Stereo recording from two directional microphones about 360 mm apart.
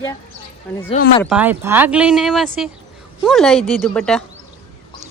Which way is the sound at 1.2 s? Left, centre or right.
Centre.